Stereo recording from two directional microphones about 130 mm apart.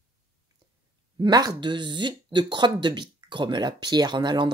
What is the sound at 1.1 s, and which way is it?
Speech, 30° right (ahead or behind).